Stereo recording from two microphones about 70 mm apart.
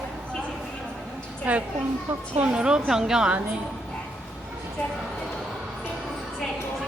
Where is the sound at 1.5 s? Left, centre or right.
Right.